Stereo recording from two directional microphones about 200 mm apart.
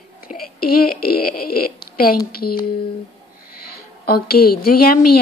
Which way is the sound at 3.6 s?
50° left (ahead or behind).